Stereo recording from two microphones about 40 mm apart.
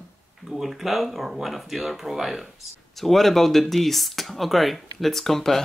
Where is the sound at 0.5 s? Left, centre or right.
Centre.